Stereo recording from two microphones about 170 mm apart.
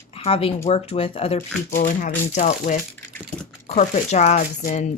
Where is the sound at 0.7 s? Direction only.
35° left (ahead or behind).